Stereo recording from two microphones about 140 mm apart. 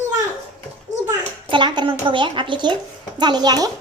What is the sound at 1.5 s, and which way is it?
A woman's voice, 35° right (ahead or behind).